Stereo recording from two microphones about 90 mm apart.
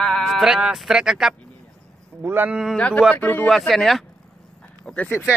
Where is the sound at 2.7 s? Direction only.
15° left (ahead or behind).